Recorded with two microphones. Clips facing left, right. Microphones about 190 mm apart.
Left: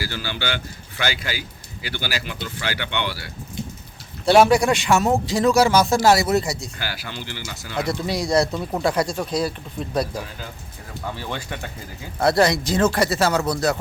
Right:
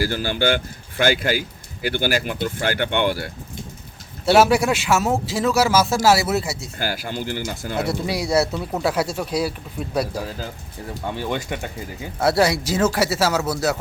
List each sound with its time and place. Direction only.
0.0 s speech: 50° right (ahead or behind)
4.3 s a man's voice: 5° right (ahead or behind)
6.7 s speech: 45° right (ahead or behind)
7.8 s speech: 10° right (ahead or behind)
11.1 s speech: 20° right (ahead or behind)
12.2 s speech: 5° right (ahead or behind)